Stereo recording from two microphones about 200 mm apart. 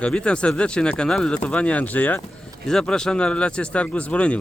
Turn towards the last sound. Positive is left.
turn(degrees=5)  # may be behind; listen again after turning